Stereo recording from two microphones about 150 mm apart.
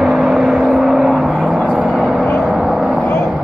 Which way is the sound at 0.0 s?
Centre (ahead or behind).